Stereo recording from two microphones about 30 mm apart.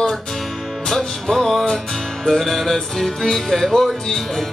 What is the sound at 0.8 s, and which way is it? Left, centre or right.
Music, centre.